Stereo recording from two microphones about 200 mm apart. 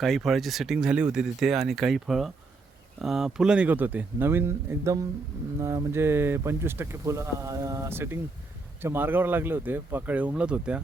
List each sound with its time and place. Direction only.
0.0 s speech: centre (ahead or behind)